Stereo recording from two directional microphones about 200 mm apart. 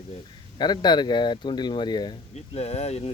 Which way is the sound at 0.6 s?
20° left (ahead or behind).